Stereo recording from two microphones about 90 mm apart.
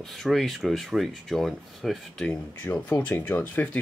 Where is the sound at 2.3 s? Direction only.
15° left (ahead or behind).